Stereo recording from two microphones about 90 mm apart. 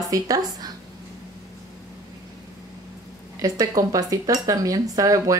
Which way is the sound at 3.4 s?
40° right (ahead or behind).